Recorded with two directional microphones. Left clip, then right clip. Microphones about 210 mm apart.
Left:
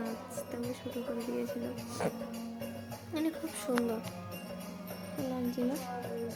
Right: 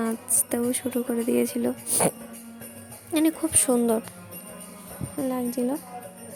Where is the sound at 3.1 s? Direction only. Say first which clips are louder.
Right 12 dB; 45° right (ahead or behind).